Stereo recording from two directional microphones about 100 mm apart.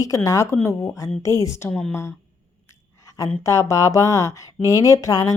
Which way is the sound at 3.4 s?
30° left (ahead or behind).